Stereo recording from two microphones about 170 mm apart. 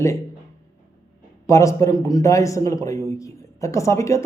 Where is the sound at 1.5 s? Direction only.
15° left (ahead or behind).